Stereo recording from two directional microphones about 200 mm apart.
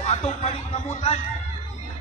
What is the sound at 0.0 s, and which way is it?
A man's voice, 30° left (ahead or behind).